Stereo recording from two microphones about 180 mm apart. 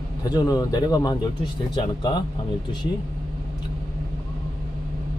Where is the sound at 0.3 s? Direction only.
20° left (ahead or behind).